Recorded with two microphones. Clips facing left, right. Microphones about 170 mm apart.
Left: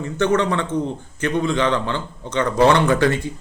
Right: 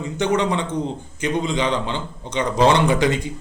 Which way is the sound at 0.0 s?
15° right (ahead or behind).